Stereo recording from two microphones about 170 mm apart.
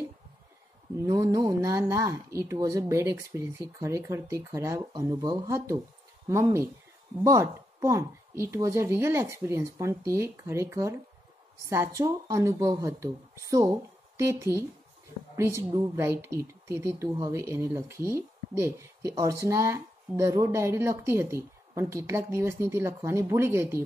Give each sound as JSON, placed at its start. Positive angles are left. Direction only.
{"t": 0.9, "sound": "a woman's voice", "side_deg": -20}